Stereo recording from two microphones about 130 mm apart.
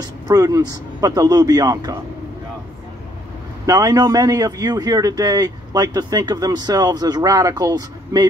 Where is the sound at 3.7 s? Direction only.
30° right (ahead or behind).